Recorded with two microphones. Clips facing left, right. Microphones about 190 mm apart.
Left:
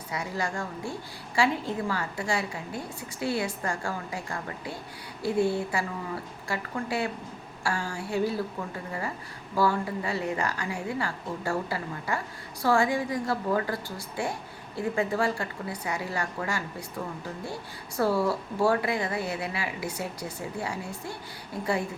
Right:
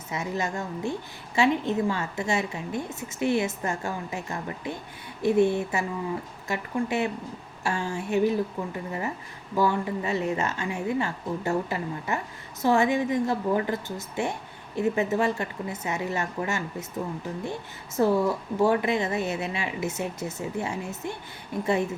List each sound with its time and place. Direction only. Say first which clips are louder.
0.1 s speech: right 2 dB; 25° right (ahead or behind)